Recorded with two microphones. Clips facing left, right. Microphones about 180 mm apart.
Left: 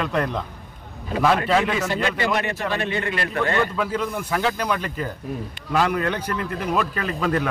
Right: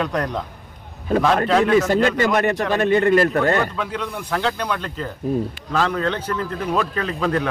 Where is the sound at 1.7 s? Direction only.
45° right (ahead or behind).